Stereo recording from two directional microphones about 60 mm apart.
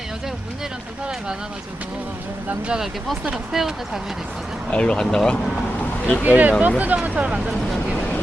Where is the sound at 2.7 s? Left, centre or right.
Centre.